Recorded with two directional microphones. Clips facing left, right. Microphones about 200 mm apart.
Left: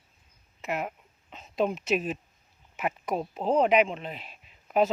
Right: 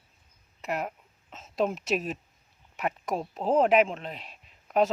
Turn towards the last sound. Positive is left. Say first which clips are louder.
# even
turn(degrees=0)  # may be behind; listen again after turning